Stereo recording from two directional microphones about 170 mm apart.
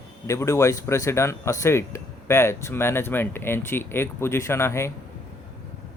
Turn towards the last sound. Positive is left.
turn(degrees=15)  # may be behind; listen again after turning